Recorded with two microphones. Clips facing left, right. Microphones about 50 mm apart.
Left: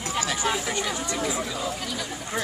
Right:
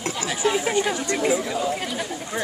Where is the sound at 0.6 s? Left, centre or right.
Right.